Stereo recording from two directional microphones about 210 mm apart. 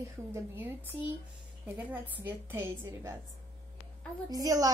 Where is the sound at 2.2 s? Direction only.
10° right (ahead or behind).